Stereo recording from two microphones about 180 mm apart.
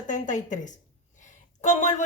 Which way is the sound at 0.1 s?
45° left (ahead or behind).